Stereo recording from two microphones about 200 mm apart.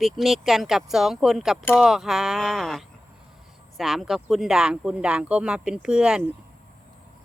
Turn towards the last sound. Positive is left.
turn(degrees=-5)  # may be behind; listen again after turning